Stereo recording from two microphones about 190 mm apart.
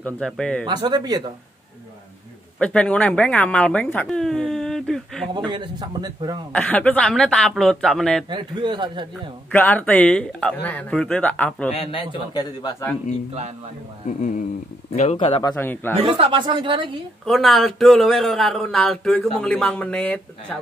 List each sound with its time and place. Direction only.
0.0 s speech: 5° left (ahead or behind)
0.7 s a man's voice: 20° right (ahead or behind)
2.6 s speech: 5° left (ahead or behind)
5.3 s a man's voice: 25° right (ahead or behind)
6.5 s speech: 5° left (ahead or behind)
8.3 s a man's voice: 25° right (ahead or behind)
9.5 s speech: 10° left (ahead or behind)
11.7 s a man's voice: 30° left (ahead or behind)
14.0 s speech: 40° left (ahead or behind)
15.5 s speech: 10° left (ahead or behind)
16.0 s a man's voice: 30° right (ahead or behind)
17.2 s speech: centre (ahead or behind)